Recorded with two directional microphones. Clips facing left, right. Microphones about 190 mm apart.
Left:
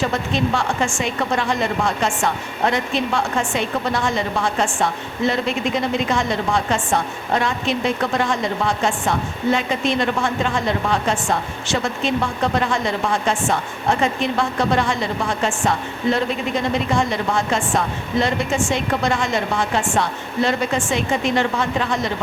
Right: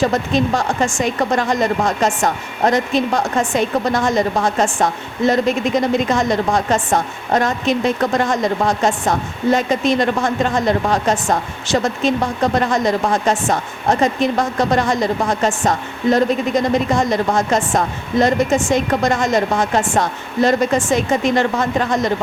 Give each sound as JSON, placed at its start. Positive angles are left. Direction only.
{"t": 0.1, "sound": "speech", "side_deg": -40}